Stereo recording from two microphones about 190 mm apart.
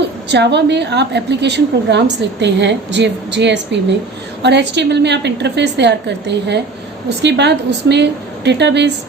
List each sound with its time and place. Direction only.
0.3 s a woman's voice: 65° right (ahead or behind)